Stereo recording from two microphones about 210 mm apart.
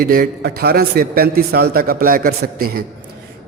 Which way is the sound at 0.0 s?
45° right (ahead or behind).